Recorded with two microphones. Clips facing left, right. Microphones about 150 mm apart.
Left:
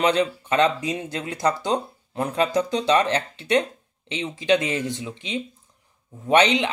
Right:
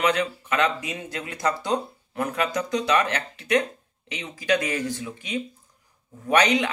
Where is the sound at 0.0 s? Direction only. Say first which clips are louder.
Left 3 dB; 30° left (ahead or behind).